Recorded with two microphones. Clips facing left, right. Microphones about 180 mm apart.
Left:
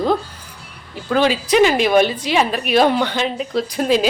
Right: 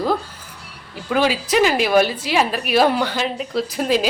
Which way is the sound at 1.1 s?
5° right (ahead or behind).